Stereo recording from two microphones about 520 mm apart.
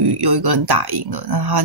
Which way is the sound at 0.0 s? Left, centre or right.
Right.